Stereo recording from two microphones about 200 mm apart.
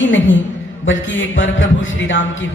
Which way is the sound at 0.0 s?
70° left (ahead or behind).